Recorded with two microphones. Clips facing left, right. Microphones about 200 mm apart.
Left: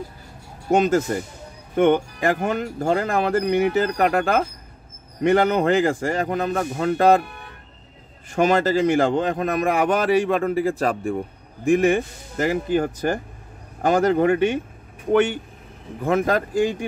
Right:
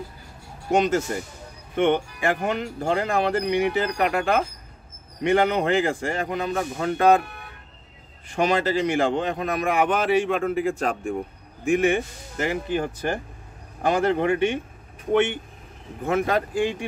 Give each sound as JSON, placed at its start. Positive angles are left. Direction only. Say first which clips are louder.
{"t": 0.7, "sound": "a man's voice", "louder": "left 3 dB", "side_deg": 40}
{"t": 8.3, "sound": "a man's voice", "louder": "left 4 dB", "side_deg": 45}